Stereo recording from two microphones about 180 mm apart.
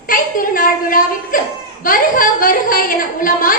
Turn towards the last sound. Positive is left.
turn(degrees=50)  # may be behind; listen again after turning